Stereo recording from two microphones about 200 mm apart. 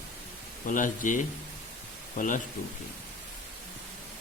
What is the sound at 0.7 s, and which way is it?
Speech, 40° left (ahead or behind).